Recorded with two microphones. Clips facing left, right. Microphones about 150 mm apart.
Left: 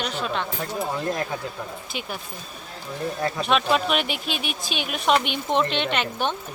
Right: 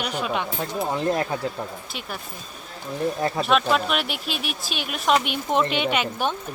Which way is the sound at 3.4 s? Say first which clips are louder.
Even; centre (ahead or behind).